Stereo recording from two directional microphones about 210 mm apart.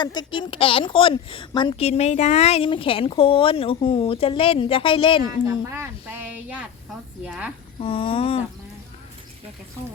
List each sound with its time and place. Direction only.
0.0 s a woman's voice: 20° left (ahead or behind)
5.2 s a woman's voice: 15° right (ahead or behind)
7.8 s a woman's voice: 25° left (ahead or behind)